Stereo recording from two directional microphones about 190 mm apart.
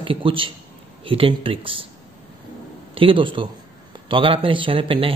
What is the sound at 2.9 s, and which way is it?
A man's voice, 25° right (ahead or behind).